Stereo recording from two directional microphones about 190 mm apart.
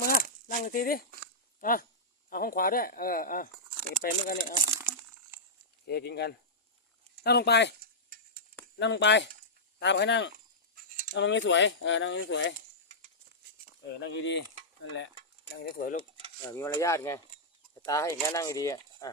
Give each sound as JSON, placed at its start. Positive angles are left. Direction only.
{"t": 0.0, "sound": "a sound", "side_deg": 45}
{"t": 1.6, "sound": "speech", "side_deg": 50}
{"t": 4.7, "sound": "crumpling", "side_deg": -15}
{"t": 5.9, "sound": "speech", "side_deg": 60}
{"t": 7.8, "sound": "a sound", "side_deg": -50}
{"t": 8.8, "sound": "speech", "side_deg": 65}
{"t": 14.0, "sound": "speech", "side_deg": 70}
{"t": 15.5, "sound": "speech", "side_deg": 50}
{"t": 16.4, "sound": "speech", "side_deg": 15}